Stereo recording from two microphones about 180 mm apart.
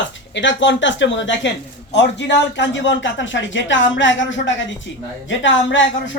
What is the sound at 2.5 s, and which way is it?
Speech, 90° left.